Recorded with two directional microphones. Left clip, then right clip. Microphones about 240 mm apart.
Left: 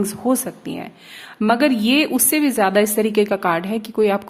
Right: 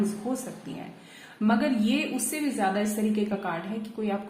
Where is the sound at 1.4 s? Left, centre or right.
Left.